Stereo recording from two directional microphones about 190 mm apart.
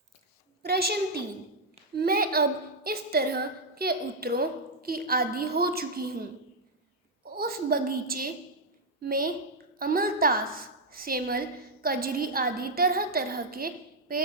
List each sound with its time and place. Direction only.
0.6 s a woman's voice: 55° right (ahead or behind)
7.3 s a woman's voice: 50° right (ahead or behind)